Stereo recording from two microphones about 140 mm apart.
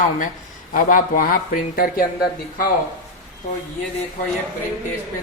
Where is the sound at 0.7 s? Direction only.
75° left (ahead or behind).